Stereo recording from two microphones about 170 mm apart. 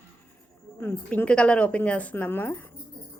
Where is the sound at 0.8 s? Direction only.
10° left (ahead or behind).